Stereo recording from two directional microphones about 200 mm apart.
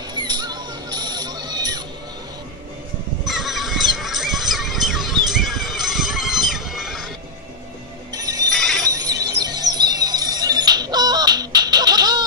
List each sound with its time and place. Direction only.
0.1 s music: 20° right (ahead or behind)
3.3 s music: centre (ahead or behind)
8.1 s music: 20° right (ahead or behind)
8.5 s shatter: centre (ahead or behind)
8.9 s music: 20° right (ahead or behind)